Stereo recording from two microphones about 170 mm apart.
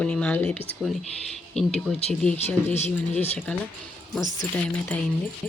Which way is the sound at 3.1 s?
40° left (ahead or behind).